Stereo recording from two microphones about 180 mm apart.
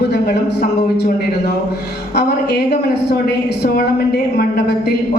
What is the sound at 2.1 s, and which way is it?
A woman's voice, 65° left (ahead or behind).